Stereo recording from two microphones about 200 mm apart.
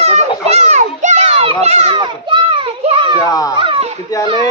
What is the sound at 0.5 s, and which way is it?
Children playing, 35° right (ahead or behind).